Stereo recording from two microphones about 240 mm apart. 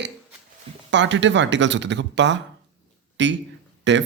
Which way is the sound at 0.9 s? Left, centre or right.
Right.